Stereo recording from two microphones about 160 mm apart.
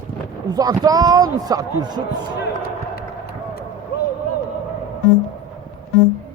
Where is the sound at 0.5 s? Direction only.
25° right (ahead or behind).